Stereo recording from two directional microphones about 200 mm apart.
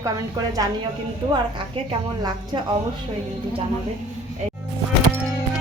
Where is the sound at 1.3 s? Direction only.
25° right (ahead or behind).